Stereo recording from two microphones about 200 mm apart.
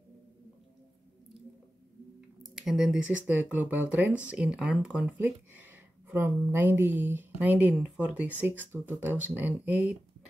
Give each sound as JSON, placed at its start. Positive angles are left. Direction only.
{"t": 2.4, "sound": "speech", "side_deg": 0}